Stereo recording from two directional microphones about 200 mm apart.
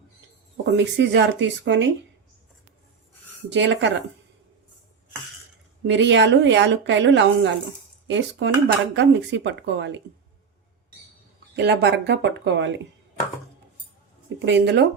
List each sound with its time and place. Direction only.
0.5 s speech: 60° right (ahead or behind)
3.5 s speech: 65° right (ahead or behind)
5.9 s speech: 65° right (ahead or behind)
11.5 s speech: 55° right (ahead or behind)
14.3 s speech: 60° right (ahead or behind)